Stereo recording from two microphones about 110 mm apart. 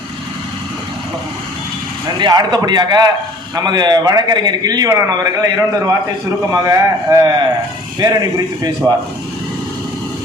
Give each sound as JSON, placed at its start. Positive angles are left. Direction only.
{"t": 2.0, "sound": "a man's voice", "side_deg": -40}
{"t": 8.8, "sound": "speech", "side_deg": -30}